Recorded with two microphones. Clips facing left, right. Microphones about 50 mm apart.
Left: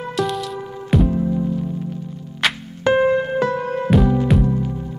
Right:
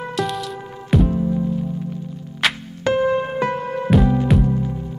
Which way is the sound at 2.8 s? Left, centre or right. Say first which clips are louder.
Left 2 dB; left.